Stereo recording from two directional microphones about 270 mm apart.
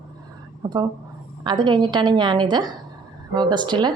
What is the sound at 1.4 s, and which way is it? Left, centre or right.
A woman's voice, centre.